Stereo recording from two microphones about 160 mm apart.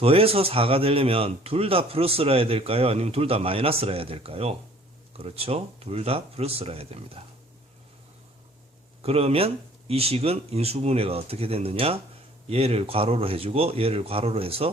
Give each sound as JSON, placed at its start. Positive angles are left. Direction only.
{"t": 0.0, "sound": "speech", "side_deg": -35}
{"t": 9.0, "sound": "speech", "side_deg": -40}